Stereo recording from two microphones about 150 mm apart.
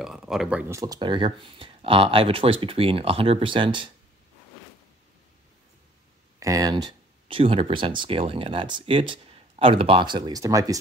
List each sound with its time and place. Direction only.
0.0 s speech: centre (ahead or behind)
0.7 s speech: 25° right (ahead or behind)
6.4 s speech: 25° right (ahead or behind)